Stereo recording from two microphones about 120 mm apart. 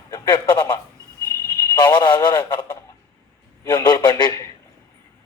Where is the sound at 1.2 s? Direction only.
25° left (ahead or behind).